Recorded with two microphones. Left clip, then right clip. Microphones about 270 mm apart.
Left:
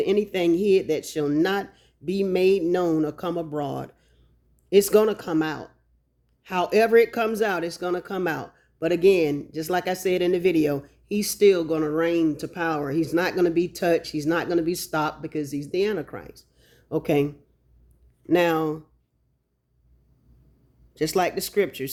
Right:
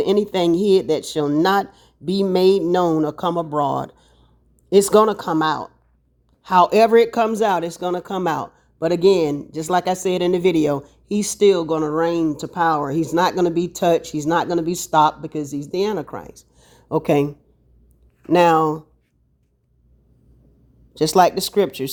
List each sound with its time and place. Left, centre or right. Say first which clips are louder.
0.0 s speech: right 4 dB; right
6.4 s speech: right 8 dB; right
20.9 s speech: right 9 dB; right